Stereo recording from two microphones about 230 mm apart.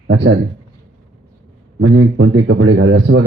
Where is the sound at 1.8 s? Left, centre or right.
Right.